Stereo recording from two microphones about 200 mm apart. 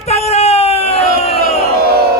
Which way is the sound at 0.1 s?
30° left (ahead or behind).